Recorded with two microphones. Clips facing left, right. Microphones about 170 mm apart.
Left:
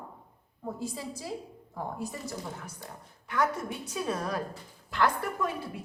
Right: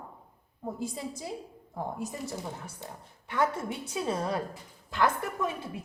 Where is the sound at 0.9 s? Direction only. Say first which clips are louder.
Even; 20° right (ahead or behind).